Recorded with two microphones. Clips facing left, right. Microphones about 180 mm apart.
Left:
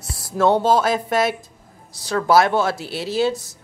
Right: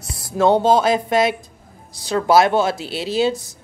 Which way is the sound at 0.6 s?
20° right (ahead or behind).